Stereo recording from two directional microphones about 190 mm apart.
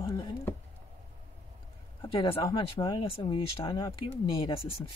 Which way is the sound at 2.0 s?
30° left (ahead or behind).